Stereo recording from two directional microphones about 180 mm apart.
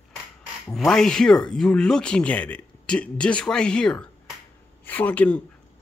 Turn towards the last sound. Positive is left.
turn(degrees=10)  # may be behind; listen again after turning